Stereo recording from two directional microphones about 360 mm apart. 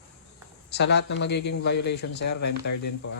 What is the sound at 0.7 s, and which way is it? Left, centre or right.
Speech, left.